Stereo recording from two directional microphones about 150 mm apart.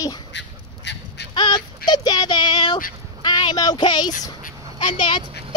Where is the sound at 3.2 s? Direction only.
30° left (ahead or behind).